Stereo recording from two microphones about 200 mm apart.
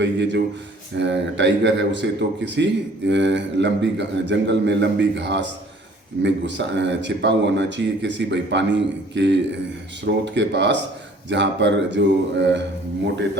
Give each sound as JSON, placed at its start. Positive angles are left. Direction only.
{"t": 0.0, "sound": "speech", "side_deg": -60}